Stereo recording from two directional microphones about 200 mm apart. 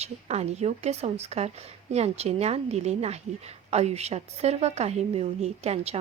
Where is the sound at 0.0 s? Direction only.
35° right (ahead or behind).